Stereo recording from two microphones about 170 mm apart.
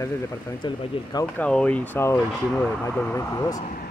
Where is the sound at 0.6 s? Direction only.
25° left (ahead or behind).